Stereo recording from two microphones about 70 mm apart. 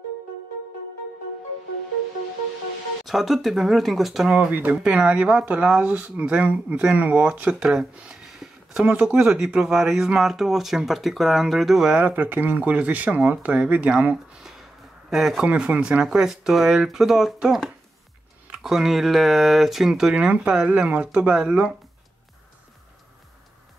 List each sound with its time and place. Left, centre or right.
3.1 s speech: centre
4.3 s speech: right
4.7 s speech: centre
7.6 s a sound: centre
8.8 s speech: centre
12.0 s speech: right
15.0 s speech: centre
15.4 s speech: centre